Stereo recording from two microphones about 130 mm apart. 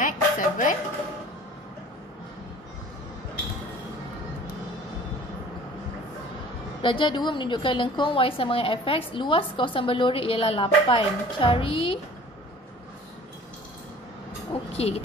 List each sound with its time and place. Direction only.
0.0 s music: 90° left
6.8 s a woman's voice: 40° left (ahead or behind)
14.5 s a sound: 50° left (ahead or behind)